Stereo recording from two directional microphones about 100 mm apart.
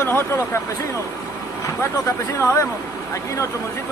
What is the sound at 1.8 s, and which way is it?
Speech, 25° left (ahead or behind).